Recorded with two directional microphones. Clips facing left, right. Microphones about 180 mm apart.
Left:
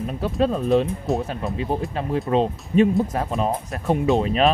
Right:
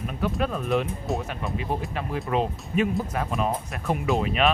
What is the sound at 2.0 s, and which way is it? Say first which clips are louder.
Speech: left 6 dB; 30° left (ahead or behind).